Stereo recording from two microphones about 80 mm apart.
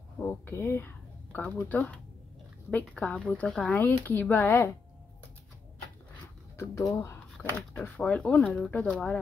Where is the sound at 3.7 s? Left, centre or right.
Left.